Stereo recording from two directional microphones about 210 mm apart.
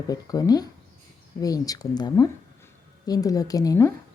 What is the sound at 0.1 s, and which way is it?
A woman's voice, 15° left (ahead or behind).